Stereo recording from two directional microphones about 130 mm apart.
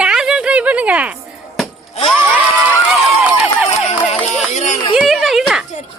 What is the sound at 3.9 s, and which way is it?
Music, 55° left (ahead or behind).